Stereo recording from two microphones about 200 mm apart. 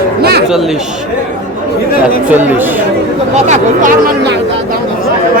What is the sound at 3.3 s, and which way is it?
Speech, 35° right (ahead or behind).